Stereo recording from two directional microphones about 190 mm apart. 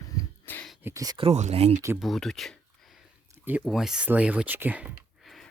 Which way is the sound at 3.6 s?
Centre (ahead or behind).